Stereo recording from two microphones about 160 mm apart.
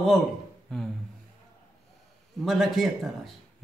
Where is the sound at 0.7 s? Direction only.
Centre (ahead or behind).